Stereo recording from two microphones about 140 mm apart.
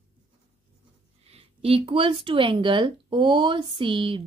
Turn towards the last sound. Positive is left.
turn(degrees=-35)  # may be behind; listen again after turning